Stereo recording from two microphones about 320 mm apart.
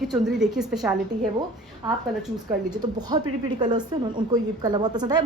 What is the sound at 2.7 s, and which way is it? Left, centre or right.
A woman's voice, centre.